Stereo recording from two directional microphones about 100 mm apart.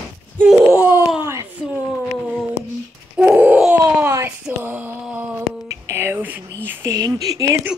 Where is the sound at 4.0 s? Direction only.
25° right (ahead or behind).